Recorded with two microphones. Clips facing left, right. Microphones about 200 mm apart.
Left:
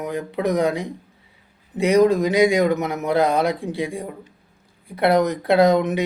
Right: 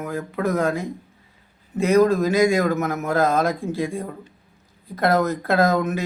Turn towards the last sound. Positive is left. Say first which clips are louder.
# left 4 dB
turn(degrees=15)  # may be behind; listen again after turning